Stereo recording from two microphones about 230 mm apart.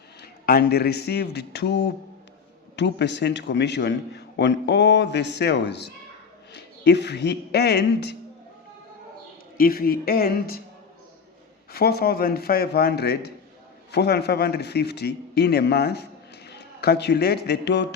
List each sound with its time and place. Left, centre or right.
0.2 s a man's voice: left
9.6 s speech: left
11.7 s a man's voice: left